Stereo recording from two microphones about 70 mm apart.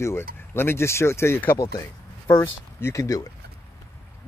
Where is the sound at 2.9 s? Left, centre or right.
Left.